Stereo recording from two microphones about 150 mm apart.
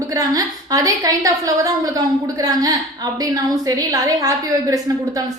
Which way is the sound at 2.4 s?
25° right (ahead or behind).